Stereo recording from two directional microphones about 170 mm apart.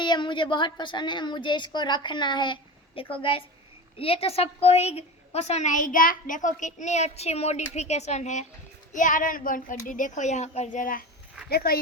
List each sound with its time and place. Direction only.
0.0 s a woman's voice: 25° left (ahead or behind); by 11.0 s 50° left (ahead or behind)
11.4 s speech: 65° left (ahead or behind)